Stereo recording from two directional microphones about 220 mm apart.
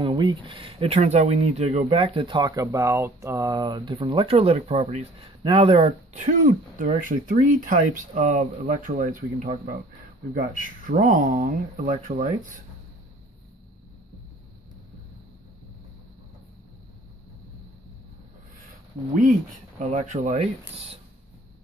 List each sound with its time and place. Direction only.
0.0 s speech: 20° right (ahead or behind)
19.8 s speech: 30° right (ahead or behind)